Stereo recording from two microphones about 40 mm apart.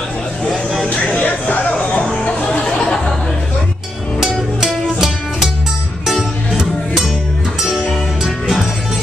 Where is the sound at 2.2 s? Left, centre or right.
Left.